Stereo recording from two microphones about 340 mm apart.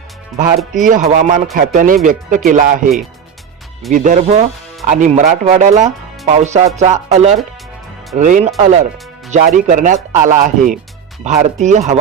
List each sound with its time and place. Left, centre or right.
0.9 s speech: right
3.9 s speech: right